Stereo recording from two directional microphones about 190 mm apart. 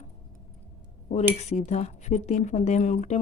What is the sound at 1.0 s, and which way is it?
Speech, 35° left (ahead or behind).